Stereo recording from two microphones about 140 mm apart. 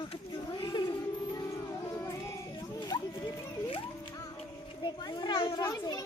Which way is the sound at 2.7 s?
30° left (ahead or behind).